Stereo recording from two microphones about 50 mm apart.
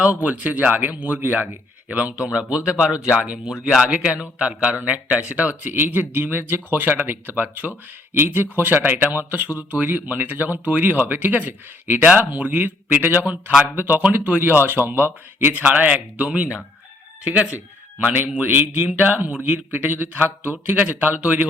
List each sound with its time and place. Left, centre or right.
0.0 s speech: right
2.2 s speech: centre; by 15.5 s right
15.5 s speech: right
18.1 s speech: right